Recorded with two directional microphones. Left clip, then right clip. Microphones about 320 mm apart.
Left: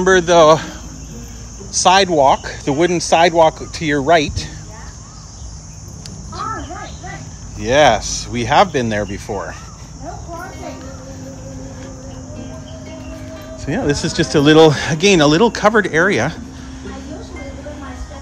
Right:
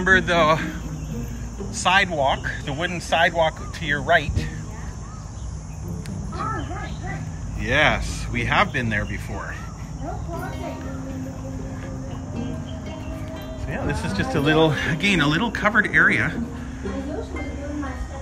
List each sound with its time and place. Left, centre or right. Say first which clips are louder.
0.0 s speech: left 7 dB; centre
6.3 s a sound: left 4 dB; centre
7.6 s speech: left 8 dB; centre
13.8 s a man's voice: left 8 dB; centre